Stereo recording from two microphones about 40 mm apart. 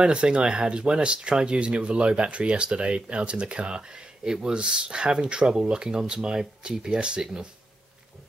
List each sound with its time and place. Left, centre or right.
0.0 s speech: right